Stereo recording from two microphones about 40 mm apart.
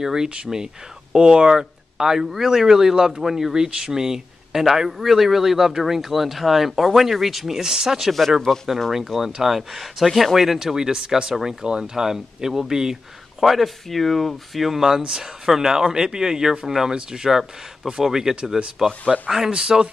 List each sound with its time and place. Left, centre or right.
0.0 s speech: centre
13.4 s speech: centre